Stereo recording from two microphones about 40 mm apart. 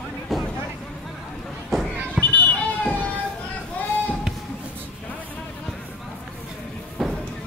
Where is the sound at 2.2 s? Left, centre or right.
Left.